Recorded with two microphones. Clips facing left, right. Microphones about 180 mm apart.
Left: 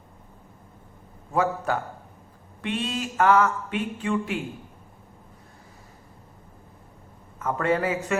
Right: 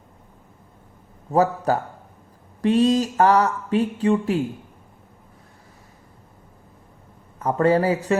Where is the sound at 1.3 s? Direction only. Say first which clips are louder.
Right 5 dB; 40° right (ahead or behind).